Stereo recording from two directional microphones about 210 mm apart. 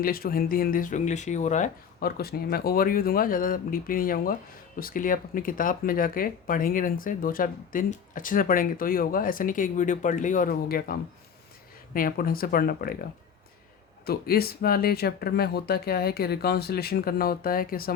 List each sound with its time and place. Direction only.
0.0 s speech: 45° left (ahead or behind)
11.9 s speech: 45° left (ahead or behind)
14.1 s speech: 45° left (ahead or behind)